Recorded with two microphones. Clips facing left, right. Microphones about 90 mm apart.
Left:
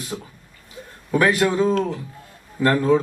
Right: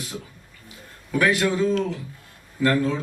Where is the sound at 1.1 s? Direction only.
35° left (ahead or behind).